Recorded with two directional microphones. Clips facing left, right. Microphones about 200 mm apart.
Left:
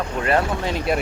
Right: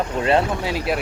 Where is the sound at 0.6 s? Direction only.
5° right (ahead or behind).